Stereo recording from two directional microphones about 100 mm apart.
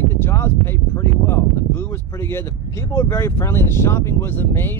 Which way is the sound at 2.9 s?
30° left (ahead or behind).